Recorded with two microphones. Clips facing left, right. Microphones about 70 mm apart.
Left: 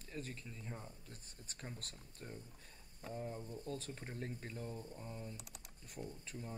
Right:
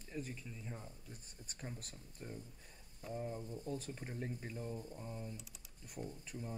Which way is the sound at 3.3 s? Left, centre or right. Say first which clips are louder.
Right 2 dB; centre.